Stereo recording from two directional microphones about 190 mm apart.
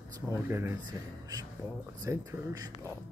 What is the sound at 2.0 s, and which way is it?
Speech, 15° right (ahead or behind).